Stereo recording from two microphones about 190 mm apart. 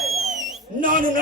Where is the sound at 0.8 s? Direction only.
45° right (ahead or behind).